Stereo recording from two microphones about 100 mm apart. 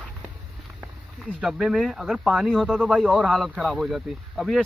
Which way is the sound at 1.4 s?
5° right (ahead or behind).